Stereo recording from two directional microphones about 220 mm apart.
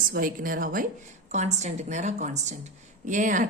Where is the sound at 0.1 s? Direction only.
40° right (ahead or behind).